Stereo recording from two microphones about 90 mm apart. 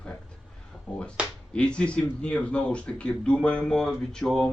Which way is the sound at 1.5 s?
10° left (ahead or behind).